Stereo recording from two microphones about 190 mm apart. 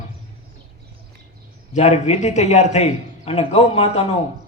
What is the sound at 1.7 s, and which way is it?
A man's voice, 35° left (ahead or behind).